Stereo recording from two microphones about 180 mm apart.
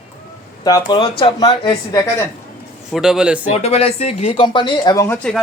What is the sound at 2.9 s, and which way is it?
Speech, 5° right (ahead or behind).